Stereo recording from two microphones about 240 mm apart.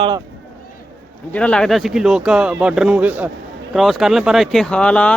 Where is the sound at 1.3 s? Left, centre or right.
Centre.